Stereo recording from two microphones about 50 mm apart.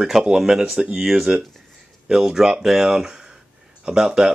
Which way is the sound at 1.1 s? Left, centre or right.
Centre.